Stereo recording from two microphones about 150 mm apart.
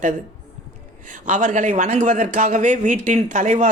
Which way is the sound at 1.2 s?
55° right (ahead or behind).